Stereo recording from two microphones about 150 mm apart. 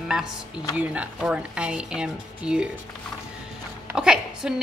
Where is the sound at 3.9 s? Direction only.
5° right (ahead or behind).